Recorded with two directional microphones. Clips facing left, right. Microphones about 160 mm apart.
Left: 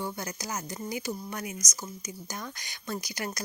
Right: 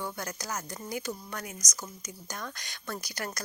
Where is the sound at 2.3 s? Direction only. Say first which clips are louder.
Right 3 dB; 10° left (ahead or behind).